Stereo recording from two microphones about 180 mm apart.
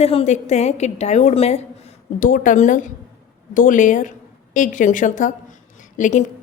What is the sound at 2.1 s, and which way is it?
A woman's voice, 50° left (ahead or behind).